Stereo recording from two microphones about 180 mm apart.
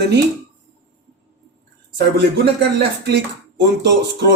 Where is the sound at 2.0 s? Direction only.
70° right (ahead or behind).